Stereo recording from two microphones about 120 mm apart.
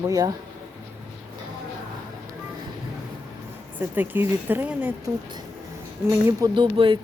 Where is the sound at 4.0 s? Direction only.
15° right (ahead or behind).